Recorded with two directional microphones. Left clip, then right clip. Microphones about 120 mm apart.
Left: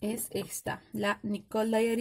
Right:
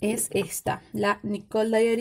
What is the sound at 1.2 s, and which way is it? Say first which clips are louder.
Speech: right 6 dB; 15° left (ahead or behind).